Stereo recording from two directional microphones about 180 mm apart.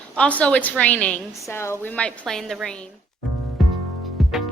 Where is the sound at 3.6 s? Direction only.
Centre (ahead or behind).